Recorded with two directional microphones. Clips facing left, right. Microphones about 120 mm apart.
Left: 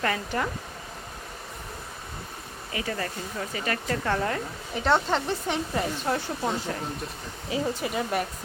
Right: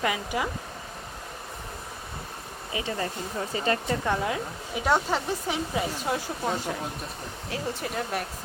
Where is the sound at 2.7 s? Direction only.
20° right (ahead or behind).